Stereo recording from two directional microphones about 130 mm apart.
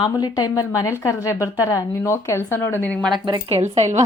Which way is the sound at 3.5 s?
50° right (ahead or behind).